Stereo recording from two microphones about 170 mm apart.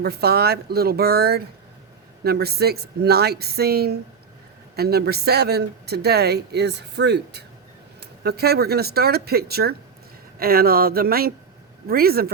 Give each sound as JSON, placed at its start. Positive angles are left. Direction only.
{"t": 0.0, "sound": "speech", "side_deg": -70}
{"t": 8.2, "sound": "speech", "side_deg": -70}